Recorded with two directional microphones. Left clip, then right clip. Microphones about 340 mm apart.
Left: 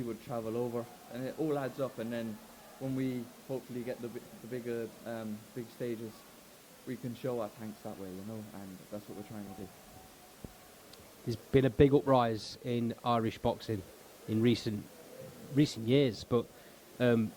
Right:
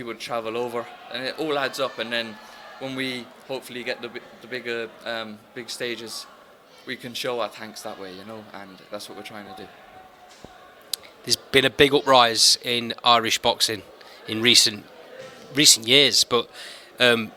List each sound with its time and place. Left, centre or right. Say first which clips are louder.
0.1 s speech: right 13 dB; centre
10.9 s speech: right 17 dB; centre